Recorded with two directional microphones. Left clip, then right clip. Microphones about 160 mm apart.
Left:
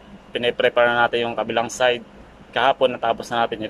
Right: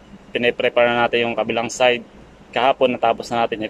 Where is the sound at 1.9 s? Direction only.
50° right (ahead or behind).